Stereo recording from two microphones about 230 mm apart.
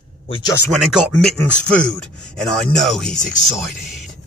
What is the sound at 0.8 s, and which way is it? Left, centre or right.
Speech, centre.